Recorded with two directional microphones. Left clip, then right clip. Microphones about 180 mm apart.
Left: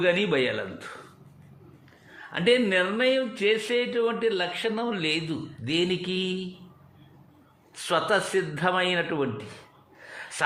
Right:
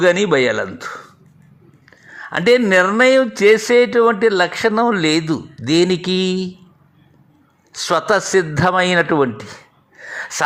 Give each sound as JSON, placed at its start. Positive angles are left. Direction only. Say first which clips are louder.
{"t": 0.0, "sound": "speech", "louder": "right 10 dB", "side_deg": -30}
{"t": 2.3, "sound": "speech", "louder": "right 10 dB", "side_deg": -35}
{"t": 7.7, "sound": "speech", "louder": "right 8 dB", "side_deg": -30}
{"t": 10.1, "sound": "gasp", "louder": "right 12 dB", "side_deg": -35}